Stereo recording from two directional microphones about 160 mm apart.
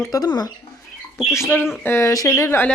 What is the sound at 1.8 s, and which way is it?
Speech, 15° left (ahead or behind).